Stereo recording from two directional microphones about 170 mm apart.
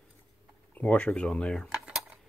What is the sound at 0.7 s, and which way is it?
Cutlery, 10° left (ahead or behind).